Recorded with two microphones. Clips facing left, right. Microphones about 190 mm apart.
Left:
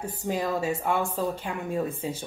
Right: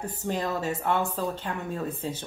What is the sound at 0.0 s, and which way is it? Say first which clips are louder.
Speech: left 1 dB; 10° left (ahead or behind).